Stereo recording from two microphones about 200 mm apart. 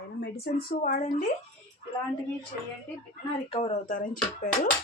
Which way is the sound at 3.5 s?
35° left (ahead or behind).